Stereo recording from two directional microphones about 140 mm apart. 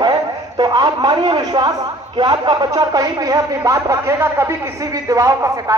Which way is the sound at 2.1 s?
30° right (ahead or behind).